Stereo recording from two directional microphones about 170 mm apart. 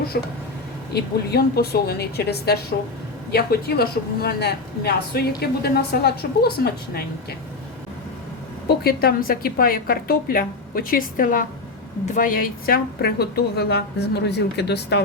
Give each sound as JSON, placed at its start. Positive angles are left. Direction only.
{"t": 0.1, "sound": "a woman's voice", "side_deg": 65}
{"t": 8.6, "sound": "a woman's voice", "side_deg": 65}